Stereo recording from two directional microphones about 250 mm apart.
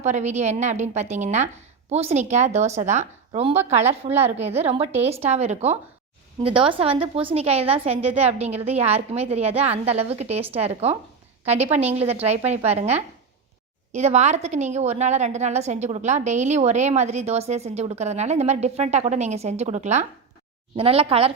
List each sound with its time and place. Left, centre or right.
0.0 s a woman's voice: right